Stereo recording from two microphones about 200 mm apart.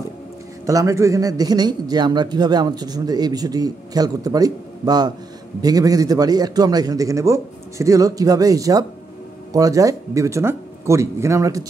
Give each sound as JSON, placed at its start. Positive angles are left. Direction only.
{"t": 0.7, "sound": "a man's voice", "side_deg": -15}